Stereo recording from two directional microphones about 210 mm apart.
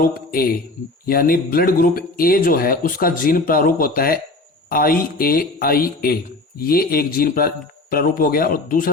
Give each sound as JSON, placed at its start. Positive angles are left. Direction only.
{"t": 0.0, "sound": "a man's voice", "side_deg": 45}